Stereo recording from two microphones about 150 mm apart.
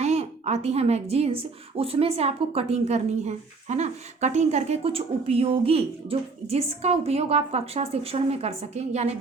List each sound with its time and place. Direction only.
0.0 s a woman's voice: 45° right (ahead or behind)